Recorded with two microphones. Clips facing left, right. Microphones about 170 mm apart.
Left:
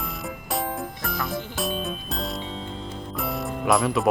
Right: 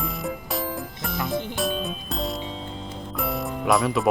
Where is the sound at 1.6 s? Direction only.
Centre (ahead or behind).